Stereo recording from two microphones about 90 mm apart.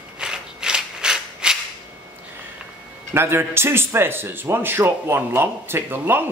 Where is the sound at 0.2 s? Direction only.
10° right (ahead or behind).